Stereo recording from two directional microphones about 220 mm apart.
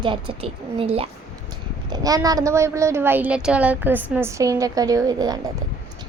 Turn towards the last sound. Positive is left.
turn(degrees=-15)  # may be behind; listen again after turning